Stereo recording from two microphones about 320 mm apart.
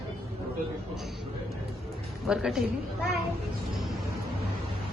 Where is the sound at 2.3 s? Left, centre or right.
Centre.